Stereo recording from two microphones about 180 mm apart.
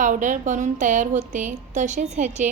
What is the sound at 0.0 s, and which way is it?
A woman's voice, 45° right (ahead or behind).